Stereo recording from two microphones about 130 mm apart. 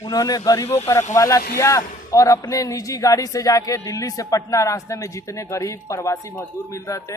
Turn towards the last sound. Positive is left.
turn(degrees=25)  # may be behind; listen again after turning